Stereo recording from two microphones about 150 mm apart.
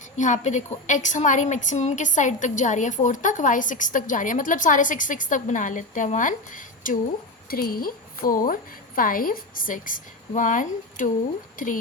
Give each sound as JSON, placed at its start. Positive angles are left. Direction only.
{"t": 0.2, "sound": "a woman's voice", "side_deg": 55}
{"t": 7.5, "sound": "a woman's voice", "side_deg": 75}